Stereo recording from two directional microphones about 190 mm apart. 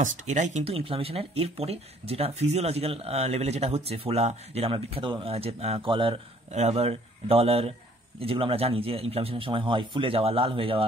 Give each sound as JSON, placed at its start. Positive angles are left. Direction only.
{"t": 0.0, "sound": "a man's voice", "side_deg": -40}